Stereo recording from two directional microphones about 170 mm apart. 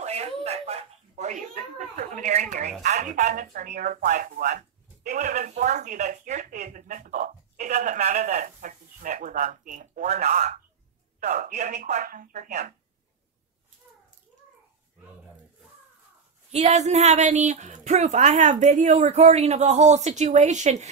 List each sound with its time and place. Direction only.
0.0 s speech: 40° right (ahead or behind)
16.5 s speech: 40° right (ahead or behind)